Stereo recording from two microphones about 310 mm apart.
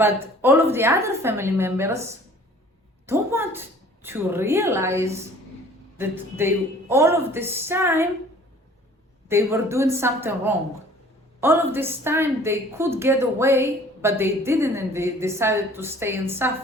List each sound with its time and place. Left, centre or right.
0.0 s a woman's voice: centre
9.3 s a woman's voice: centre